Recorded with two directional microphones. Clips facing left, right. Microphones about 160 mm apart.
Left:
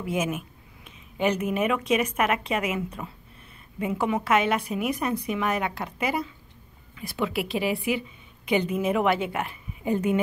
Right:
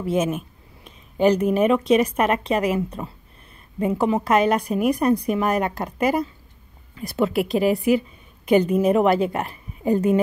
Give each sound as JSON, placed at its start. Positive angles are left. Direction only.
{"t": 0.0, "sound": "a woman's voice", "side_deg": -30}